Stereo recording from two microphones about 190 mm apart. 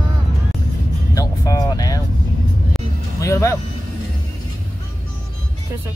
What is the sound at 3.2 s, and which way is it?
Vehicle, 15° left (ahead or behind).